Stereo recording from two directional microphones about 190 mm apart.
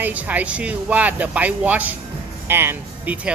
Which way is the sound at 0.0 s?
10° right (ahead or behind).